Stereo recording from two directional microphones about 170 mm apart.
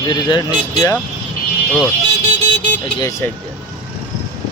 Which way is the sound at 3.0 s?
20° left (ahead or behind).